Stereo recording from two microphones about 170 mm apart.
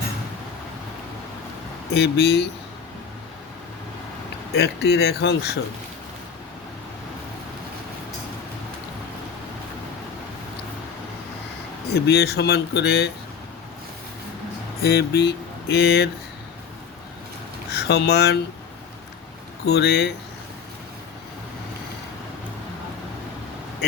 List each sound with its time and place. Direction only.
1.9 s speech: 75° left (ahead or behind)
4.5 s speech: 75° left (ahead or behind)
11.9 s speech: 75° left (ahead or behind)
14.8 s speech: 65° left (ahead or behind)
17.7 s speech: 80° left
19.6 s speech: 75° left (ahead or behind)